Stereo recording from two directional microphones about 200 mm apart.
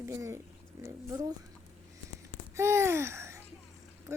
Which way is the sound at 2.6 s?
15° right (ahead or behind).